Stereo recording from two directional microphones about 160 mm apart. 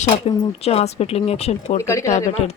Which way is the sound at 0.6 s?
40° left (ahead or behind).